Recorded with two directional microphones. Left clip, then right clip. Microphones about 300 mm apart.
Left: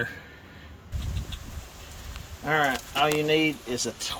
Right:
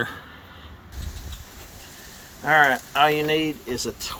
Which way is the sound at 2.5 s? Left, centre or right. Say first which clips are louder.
Right 7 dB; centre.